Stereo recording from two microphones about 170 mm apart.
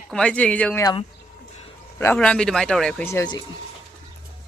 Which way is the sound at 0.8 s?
25° left (ahead or behind).